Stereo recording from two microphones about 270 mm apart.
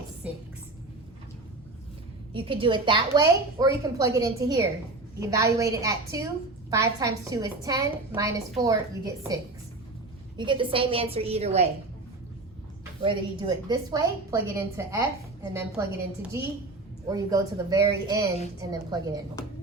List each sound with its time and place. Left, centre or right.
0.2 s a sound: centre
2.3 s a woman's voice: centre
13.0 s a woman's voice: centre
17.1 s a woman's voice: centre